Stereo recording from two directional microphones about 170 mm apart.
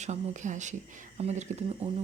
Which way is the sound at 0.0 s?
45° right (ahead or behind).